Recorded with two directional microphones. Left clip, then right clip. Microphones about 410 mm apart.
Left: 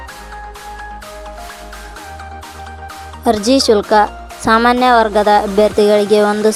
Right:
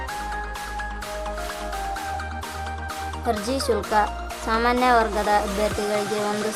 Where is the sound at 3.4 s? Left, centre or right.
Centre.